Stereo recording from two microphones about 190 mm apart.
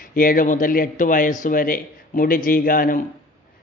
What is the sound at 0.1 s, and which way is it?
A man's voice, 45° left (ahead or behind).